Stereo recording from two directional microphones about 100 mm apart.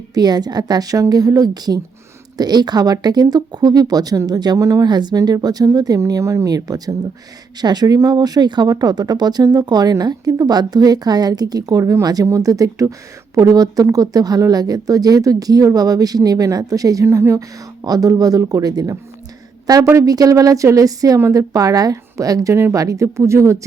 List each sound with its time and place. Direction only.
0.1 s a woman's voice: 40° right (ahead or behind)